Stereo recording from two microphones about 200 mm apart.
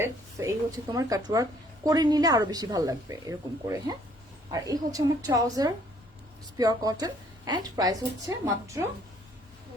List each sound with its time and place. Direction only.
0.0 s a woman's voice: 15° right (ahead or behind)